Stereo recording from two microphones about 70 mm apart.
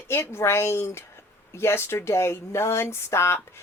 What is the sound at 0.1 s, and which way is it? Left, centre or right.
Speech, left.